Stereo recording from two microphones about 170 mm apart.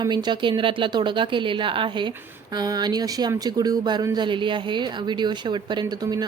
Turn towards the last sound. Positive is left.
turn(degrees=-25)  # may be behind; listen again after turning